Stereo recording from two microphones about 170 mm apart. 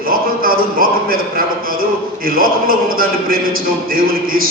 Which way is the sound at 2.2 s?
60° right (ahead or behind).